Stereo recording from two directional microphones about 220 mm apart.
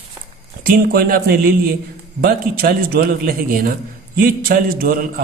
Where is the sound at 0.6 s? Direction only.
40° right (ahead or behind).